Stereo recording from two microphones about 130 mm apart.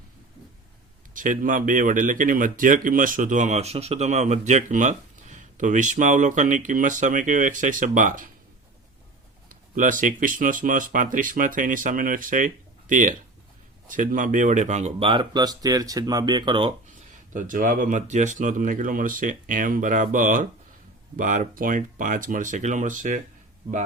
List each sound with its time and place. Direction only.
1.1 s speech: 90° right
9.5 s speech: 90° right; by 15.0 s 60° right (ahead or behind)
15.0 s speech: 40° right (ahead or behind)
17.3 s speech: 90° right; by 23.2 s 75° right (ahead or behind)